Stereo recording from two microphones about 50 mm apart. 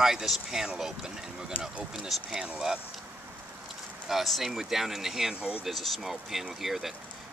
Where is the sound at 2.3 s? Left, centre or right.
Centre.